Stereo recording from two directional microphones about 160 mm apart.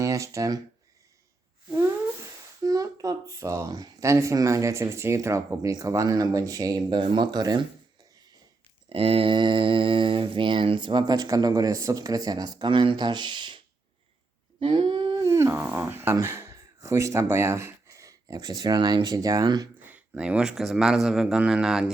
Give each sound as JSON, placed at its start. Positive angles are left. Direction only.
{"t": 0.0, "sound": "speech", "side_deg": -20}
{"t": 2.6, "sound": "speech", "side_deg": -20}
{"t": 8.9, "sound": "speech", "side_deg": -35}
{"t": 14.6, "sound": "speech", "side_deg": -30}
{"t": 19.8, "sound": "a man's voice", "side_deg": -10}